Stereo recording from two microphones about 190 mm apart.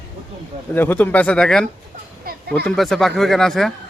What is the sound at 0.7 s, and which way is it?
Speech, 10° left (ahead or behind).